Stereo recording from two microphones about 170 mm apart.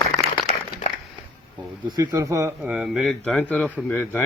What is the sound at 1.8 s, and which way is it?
Speech, 20° right (ahead or behind).